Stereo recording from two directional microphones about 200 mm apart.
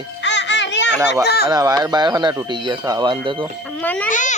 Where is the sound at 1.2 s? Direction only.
55° left (ahead or behind).